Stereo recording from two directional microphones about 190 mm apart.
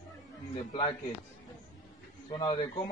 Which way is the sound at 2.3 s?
25° left (ahead or behind).